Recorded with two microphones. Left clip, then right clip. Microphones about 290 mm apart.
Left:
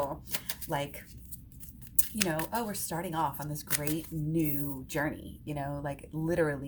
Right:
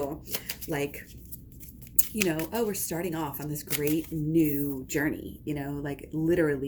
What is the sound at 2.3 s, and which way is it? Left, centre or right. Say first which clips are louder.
Speech: right 4 dB; centre.